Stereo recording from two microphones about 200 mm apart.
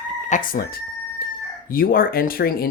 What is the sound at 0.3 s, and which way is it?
Speech, 40° left (ahead or behind).